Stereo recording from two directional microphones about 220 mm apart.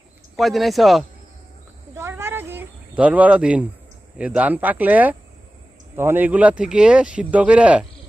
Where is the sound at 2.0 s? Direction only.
10° right (ahead or behind).